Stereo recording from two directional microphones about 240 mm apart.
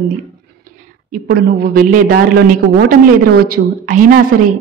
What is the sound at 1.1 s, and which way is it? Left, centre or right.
A woman's voice, right.